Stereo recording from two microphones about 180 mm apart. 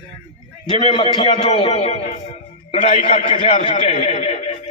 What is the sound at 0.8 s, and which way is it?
A man's voice, 30° left (ahead or behind).